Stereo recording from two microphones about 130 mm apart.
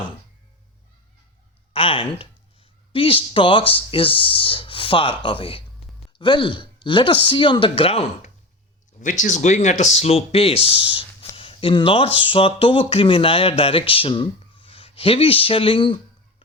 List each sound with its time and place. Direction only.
1.7 s speech: 45° left (ahead or behind)
9.0 s speech: 75° left (ahead or behind); by 16.0 s 45° left (ahead or behind)